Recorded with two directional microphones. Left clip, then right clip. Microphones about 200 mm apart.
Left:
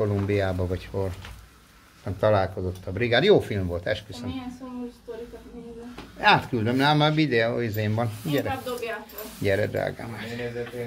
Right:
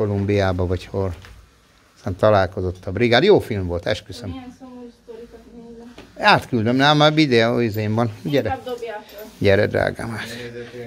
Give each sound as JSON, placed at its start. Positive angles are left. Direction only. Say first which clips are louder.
{"t": 0.0, "sound": "speech", "louder": "right 5 dB", "side_deg": -45}
{"t": 6.1, "sound": "speech", "louder": "right 4 dB", "side_deg": -55}